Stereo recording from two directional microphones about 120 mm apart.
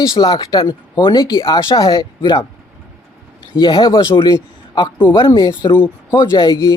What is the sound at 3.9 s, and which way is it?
Speech, 25° left (ahead or behind).